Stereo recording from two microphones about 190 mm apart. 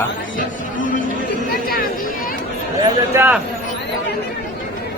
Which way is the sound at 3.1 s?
15° right (ahead or behind).